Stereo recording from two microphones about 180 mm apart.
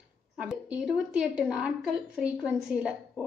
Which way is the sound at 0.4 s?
5° right (ahead or behind).